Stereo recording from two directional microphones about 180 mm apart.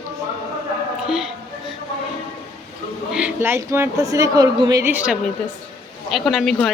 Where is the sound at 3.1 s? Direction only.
10° right (ahead or behind).